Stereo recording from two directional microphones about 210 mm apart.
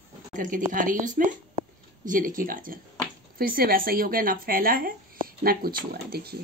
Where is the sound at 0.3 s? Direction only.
40° right (ahead or behind).